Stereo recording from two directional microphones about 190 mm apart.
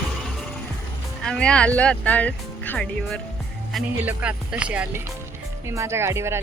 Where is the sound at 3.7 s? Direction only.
10° right (ahead or behind).